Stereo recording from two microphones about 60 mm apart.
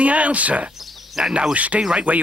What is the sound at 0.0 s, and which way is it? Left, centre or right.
Speech, right.